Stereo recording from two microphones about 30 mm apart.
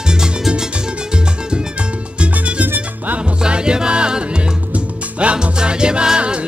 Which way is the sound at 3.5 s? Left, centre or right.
Right.